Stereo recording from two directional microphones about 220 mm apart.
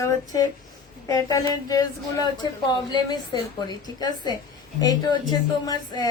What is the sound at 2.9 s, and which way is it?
A woman's voice, 20° left (ahead or behind).